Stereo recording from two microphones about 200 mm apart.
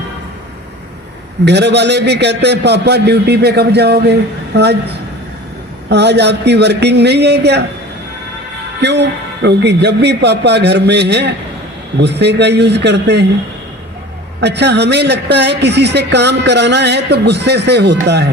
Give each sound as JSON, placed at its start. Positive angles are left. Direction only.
{"t": 1.5, "sound": "speech", "side_deg": -60}
{"t": 5.9, "sound": "speech", "side_deg": -60}
{"t": 8.8, "sound": "speech", "side_deg": -60}
{"t": 14.4, "sound": "speech", "side_deg": -60}